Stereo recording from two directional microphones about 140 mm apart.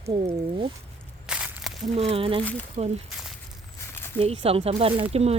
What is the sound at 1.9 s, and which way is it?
Speech, 45° right (ahead or behind).